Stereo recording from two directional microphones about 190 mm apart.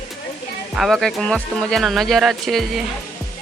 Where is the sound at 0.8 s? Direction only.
Centre (ahead or behind).